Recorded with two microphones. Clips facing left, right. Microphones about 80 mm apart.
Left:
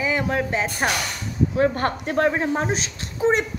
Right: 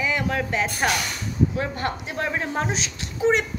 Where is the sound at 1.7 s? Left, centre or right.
Left.